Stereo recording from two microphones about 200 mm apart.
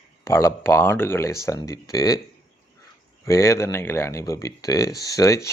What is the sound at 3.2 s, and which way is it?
Speech, 15° left (ahead or behind).